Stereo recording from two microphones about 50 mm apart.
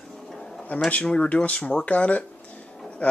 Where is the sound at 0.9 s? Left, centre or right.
Left.